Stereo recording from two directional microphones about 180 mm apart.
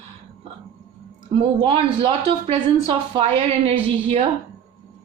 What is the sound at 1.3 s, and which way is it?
A woman's voice, 30° right (ahead or behind).